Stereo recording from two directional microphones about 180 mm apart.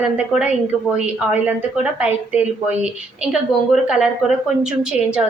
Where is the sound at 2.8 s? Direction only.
5° right (ahead or behind).